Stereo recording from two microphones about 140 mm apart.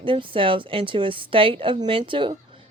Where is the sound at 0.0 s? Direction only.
35° right (ahead or behind).